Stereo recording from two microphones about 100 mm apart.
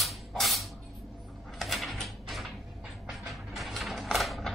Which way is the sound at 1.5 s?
Centre (ahead or behind).